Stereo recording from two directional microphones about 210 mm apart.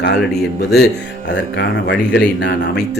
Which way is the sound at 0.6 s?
55° left (ahead or behind).